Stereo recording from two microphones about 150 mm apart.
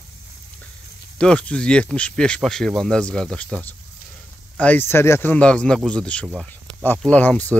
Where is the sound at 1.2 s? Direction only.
5° left (ahead or behind).